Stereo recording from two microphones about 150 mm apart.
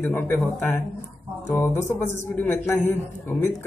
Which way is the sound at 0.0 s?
15° left (ahead or behind).